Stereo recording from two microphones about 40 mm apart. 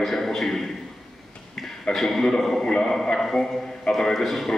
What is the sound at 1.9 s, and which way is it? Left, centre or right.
A man's voice, centre.